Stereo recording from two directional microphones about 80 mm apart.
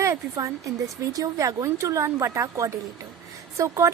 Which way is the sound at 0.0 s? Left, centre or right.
Right.